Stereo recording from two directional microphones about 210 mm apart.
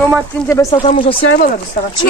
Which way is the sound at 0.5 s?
15° left (ahead or behind).